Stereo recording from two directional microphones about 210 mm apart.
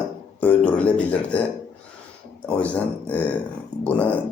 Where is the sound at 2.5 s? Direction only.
5° left (ahead or behind).